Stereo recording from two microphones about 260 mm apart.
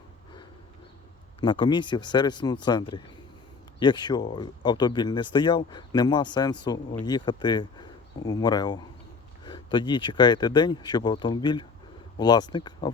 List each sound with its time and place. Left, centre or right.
1.4 s speech: centre